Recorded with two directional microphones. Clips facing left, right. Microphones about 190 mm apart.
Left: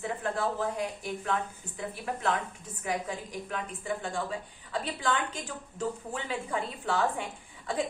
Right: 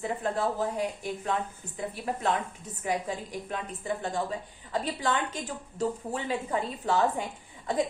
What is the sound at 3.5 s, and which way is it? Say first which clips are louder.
A woman's voice: right 1 dB; 40° right (ahead or behind).